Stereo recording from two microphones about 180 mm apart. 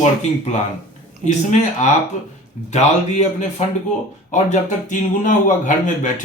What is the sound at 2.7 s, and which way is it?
Speech, 40° left (ahead or behind).